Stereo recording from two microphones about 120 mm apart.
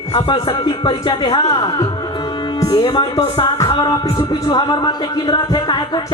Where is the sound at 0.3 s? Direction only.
40° left (ahead or behind).